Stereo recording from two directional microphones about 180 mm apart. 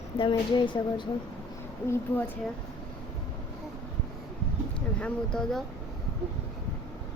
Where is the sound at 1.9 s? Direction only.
10° left (ahead or behind).